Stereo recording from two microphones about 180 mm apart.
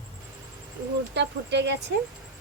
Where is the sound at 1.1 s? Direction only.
70° right (ahead or behind).